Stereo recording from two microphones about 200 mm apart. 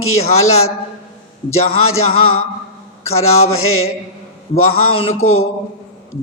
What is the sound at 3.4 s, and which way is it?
Speech, 90° left.